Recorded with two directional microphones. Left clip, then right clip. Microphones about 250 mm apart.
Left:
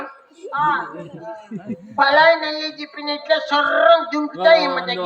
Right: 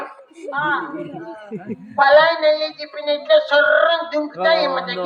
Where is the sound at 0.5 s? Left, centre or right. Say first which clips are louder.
Left 2 dB; centre.